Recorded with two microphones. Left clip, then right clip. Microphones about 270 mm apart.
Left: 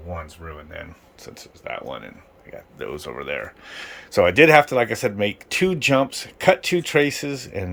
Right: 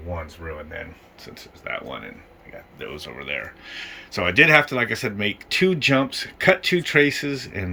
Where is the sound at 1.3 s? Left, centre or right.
Centre.